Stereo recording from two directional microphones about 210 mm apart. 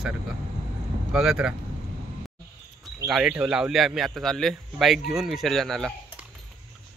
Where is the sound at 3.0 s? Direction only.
Centre (ahead or behind).